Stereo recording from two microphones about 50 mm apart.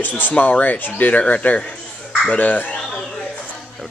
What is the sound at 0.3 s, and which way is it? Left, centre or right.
Speech, left.